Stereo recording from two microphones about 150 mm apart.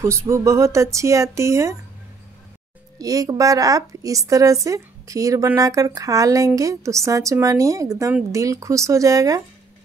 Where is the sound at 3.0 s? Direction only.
25° right (ahead or behind).